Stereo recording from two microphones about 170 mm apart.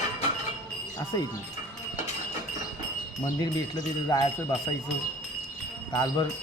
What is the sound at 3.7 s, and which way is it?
Speech, 25° left (ahead or behind).